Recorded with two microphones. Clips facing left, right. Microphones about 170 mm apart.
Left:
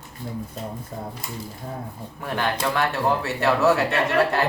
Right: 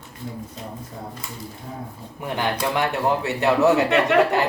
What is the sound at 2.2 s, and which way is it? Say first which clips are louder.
Speech: right 1 dB; 15° right (ahead or behind).